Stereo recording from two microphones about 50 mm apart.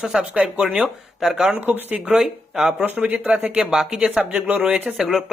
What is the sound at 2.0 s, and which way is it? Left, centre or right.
Speech, centre.